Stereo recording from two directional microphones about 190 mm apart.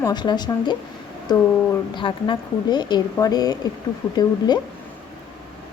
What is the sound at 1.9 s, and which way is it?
A woman's voice, 25° left (ahead or behind).